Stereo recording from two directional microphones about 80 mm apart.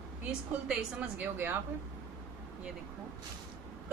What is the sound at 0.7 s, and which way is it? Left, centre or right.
Speech, centre.